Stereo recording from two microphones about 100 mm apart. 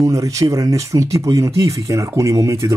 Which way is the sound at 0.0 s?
35° right (ahead or behind).